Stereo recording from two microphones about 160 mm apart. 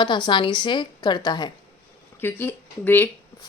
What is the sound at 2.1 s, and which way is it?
Speech, 15° left (ahead or behind).